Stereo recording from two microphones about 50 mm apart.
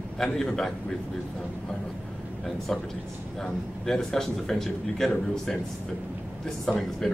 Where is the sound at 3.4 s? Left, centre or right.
Centre.